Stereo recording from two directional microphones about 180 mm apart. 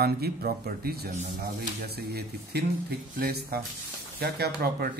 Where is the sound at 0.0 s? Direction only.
60° right (ahead or behind).